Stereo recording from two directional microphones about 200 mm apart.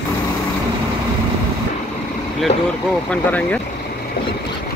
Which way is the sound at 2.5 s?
35° left (ahead or behind).